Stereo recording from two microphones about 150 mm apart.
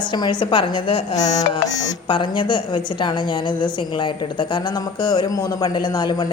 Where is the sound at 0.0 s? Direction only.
30° left (ahead or behind).